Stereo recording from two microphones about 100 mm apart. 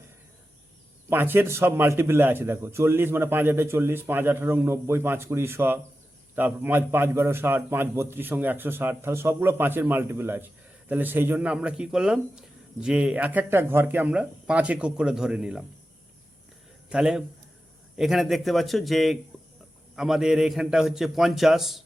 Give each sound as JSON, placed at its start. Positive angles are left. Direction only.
{"t": 1.1, "sound": "a man's voice", "side_deg": -20}
{"t": 16.9, "sound": "a man's voice", "side_deg": -5}